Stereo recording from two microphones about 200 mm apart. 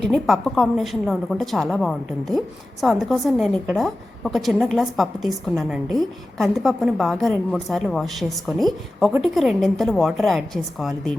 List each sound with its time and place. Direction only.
0.0 s a woman's voice: centre (ahead or behind)